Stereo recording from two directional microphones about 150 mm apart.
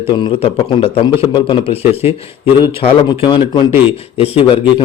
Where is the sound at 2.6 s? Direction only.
30° left (ahead or behind).